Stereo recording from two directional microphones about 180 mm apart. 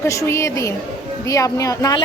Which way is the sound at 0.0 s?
15° left (ahead or behind).